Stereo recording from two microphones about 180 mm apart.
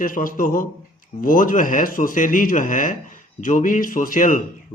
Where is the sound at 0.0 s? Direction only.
50° left (ahead or behind).